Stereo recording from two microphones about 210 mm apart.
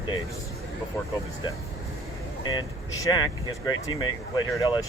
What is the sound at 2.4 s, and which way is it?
Speech, 20° left (ahead or behind).